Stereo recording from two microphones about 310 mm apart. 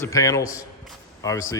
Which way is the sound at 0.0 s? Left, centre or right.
Centre.